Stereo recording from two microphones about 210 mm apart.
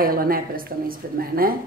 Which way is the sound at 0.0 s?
45° right (ahead or behind).